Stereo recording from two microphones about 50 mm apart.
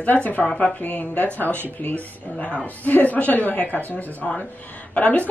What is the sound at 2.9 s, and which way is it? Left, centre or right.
A man's voice, left.